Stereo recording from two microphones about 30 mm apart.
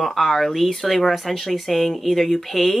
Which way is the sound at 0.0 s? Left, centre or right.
Centre.